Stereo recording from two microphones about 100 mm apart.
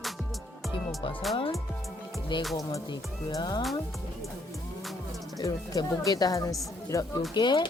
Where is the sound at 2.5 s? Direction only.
35° left (ahead or behind).